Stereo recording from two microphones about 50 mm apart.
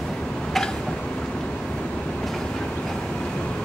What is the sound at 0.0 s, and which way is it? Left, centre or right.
Tick-tock, centre.